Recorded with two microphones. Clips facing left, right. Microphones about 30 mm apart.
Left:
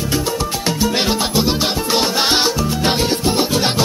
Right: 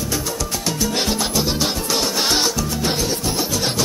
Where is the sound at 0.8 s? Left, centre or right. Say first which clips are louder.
Left 4 dB; left.